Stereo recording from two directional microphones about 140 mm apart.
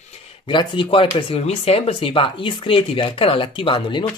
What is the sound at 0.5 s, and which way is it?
Speech, 35° left (ahead or behind).